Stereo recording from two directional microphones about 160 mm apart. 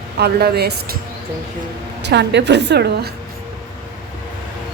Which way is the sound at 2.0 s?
90° right.